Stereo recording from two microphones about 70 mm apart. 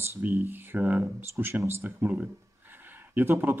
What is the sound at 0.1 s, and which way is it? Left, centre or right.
Speech, right.